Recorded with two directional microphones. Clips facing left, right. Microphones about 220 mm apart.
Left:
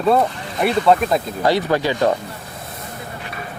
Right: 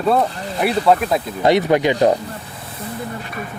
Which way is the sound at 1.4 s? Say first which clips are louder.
Right 5 dB; 20° right (ahead or behind).